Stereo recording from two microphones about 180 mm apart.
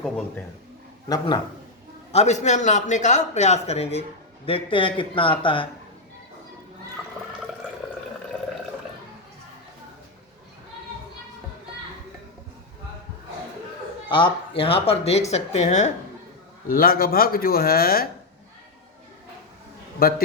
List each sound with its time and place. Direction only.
1.0 s speech: 20° left (ahead or behind)
2.1 s a man's voice: 40° left (ahead or behind)
14.1 s a man's voice: 25° left (ahead or behind)
16.6 s speech: 55° left (ahead or behind)
20.0 s speech: 55° left (ahead or behind)